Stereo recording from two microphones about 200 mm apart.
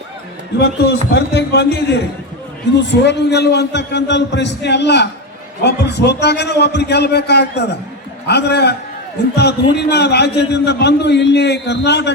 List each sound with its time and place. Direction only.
1.1 s a man's voice: 55° left (ahead or behind)